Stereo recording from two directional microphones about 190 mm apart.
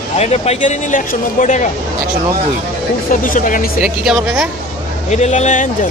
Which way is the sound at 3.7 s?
5° right (ahead or behind).